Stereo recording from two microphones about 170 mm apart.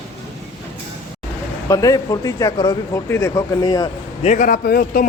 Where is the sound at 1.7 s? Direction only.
20° left (ahead or behind).